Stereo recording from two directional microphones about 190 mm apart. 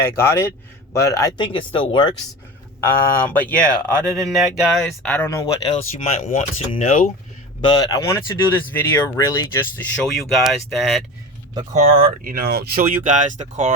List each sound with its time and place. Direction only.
0.0 s speech: 15° left (ahead or behind)
2.8 s speech: 10° left (ahead or behind)
3.9 s speech: 15° right (ahead or behind)
4.8 s speech: 5° left (ahead or behind)
5.7 s speech: 35° left (ahead or behind)
7.6 s speech: 20° left (ahead or behind); by 11.0 s centre (ahead or behind)
11.8 s speech: 45° right (ahead or behind)
13.1 s speech: 40° right (ahead or behind)